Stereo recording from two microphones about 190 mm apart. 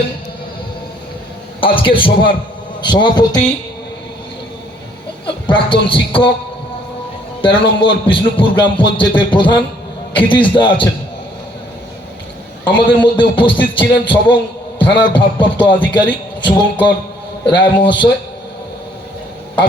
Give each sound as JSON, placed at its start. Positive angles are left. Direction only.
{"t": 1.6, "sound": "a man's voice", "side_deg": 25}
{"t": 5.2, "sound": "speech", "side_deg": 25}
{"t": 7.4, "sound": "a man's voice", "side_deg": 25}
{"t": 12.6, "sound": "a man's voice", "side_deg": 25}